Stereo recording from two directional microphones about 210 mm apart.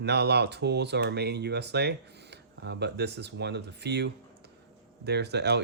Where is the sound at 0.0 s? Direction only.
50° right (ahead or behind).